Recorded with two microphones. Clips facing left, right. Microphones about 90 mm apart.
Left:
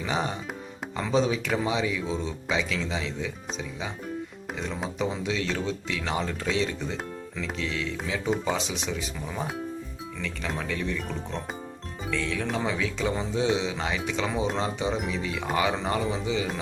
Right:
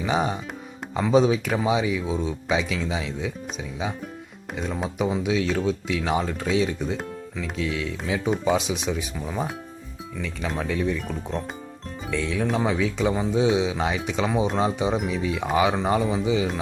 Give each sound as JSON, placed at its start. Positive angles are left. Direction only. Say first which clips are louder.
{"t": 0.0, "sound": "speech", "louder": "right 5 dB", "side_deg": -20}
{"t": 4.9, "sound": "speech", "louder": "right 6 dB", "side_deg": -10}
{"t": 6.9, "sound": "music", "louder": "right 4 dB", "side_deg": 0}
{"t": 7.6, "sound": "speech", "louder": "right 4 dB", "side_deg": -15}